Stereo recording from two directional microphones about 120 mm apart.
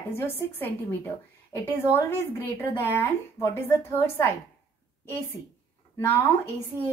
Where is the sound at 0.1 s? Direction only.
20° left (ahead or behind).